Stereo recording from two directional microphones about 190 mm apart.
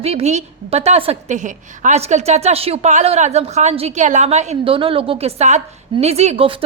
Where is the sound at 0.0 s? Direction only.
35° right (ahead or behind).